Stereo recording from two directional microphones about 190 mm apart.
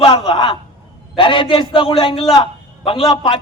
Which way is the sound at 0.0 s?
25° left (ahead or behind).